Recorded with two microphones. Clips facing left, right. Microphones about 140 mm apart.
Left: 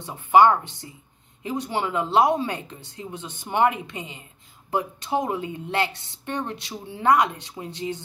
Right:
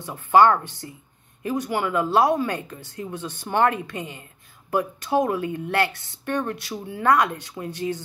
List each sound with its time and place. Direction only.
0.0 s a woman's voice: 15° left (ahead or behind)